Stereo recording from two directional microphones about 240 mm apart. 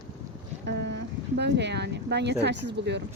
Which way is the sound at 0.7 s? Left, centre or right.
Right.